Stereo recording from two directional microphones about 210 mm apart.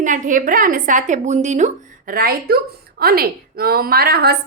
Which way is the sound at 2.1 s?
45° right (ahead or behind).